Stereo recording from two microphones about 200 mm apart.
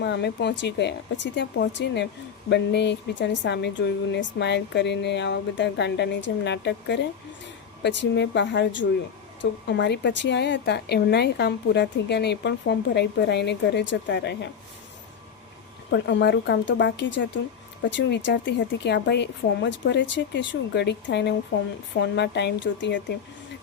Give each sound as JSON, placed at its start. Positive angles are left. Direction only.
{"t": 0.0, "sound": "a woman's voice", "side_deg": 60}
{"t": 15.9, "sound": "a woman's voice", "side_deg": 60}